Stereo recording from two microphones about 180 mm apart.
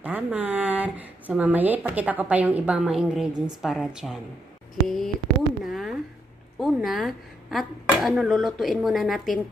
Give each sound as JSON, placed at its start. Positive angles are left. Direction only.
{"t": 0.0, "sound": "speech", "side_deg": -10}
{"t": 5.6, "sound": "a sound", "side_deg": 0}
{"t": 6.6, "sound": "a woman's voice", "side_deg": 0}